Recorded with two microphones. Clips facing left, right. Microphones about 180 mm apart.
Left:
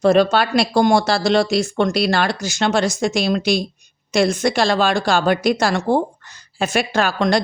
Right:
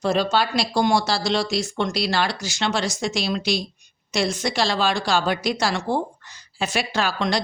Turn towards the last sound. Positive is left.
turn(degrees=50)  # may be behind; listen again after turning